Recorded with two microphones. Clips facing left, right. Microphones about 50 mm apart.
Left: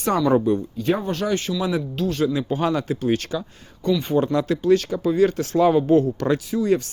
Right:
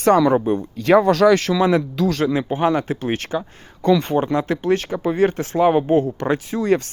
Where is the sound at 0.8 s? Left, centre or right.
Right.